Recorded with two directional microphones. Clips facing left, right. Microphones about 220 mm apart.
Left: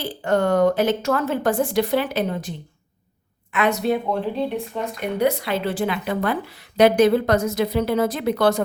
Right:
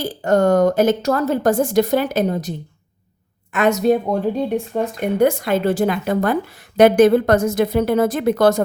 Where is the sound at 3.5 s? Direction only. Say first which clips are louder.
Right 5 dB; 45° right (ahead or behind).